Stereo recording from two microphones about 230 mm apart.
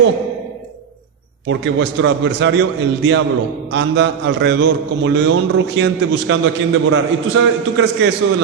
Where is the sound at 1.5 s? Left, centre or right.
Right.